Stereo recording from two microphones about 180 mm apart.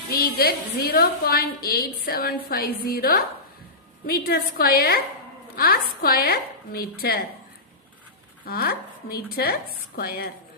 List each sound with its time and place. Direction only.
0.1 s a woman's voice: 60° left (ahead or behind)
8.4 s a woman's voice: 60° left (ahead or behind)